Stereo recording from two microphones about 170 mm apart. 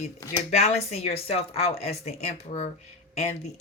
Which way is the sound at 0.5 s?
40° left (ahead or behind).